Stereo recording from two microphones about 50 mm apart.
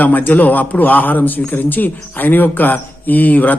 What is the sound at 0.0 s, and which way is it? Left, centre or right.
Speech, left.